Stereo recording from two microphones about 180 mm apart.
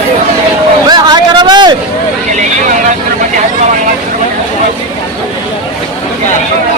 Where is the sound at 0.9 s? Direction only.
25° right (ahead or behind).